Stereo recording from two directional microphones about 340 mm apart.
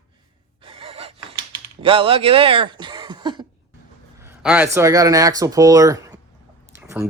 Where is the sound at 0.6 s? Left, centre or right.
Centre.